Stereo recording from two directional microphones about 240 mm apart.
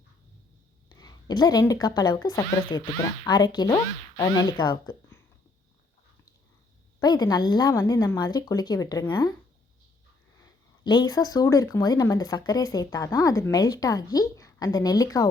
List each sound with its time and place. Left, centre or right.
0.9 s speech: centre
7.0 s speech: centre
10.8 s speech: centre